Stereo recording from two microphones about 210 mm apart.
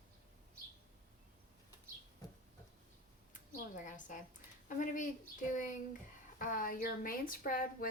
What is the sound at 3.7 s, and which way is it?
A woman's voice, 40° left (ahead or behind).